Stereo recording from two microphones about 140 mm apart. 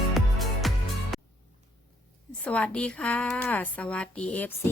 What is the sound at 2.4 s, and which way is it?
A woman's voice, 10° left (ahead or behind).